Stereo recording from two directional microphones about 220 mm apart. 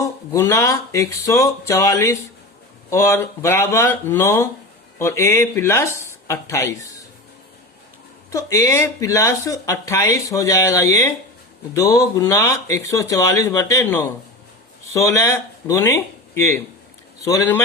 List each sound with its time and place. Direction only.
0.0 s speech: 15° left (ahead or behind)
8.3 s speech: 15° left (ahead or behind)